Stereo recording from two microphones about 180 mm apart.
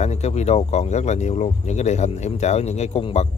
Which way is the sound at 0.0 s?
35° left (ahead or behind).